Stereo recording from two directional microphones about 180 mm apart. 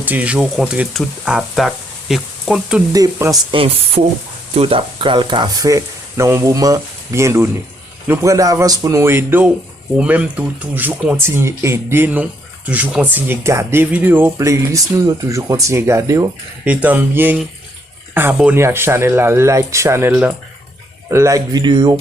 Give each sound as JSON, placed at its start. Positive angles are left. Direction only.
{"t": 0.0, "sound": "speech", "side_deg": -10}
{"t": 2.9, "sound": "speech", "side_deg": -20}
{"t": 3.5, "sound": "speech", "side_deg": -30}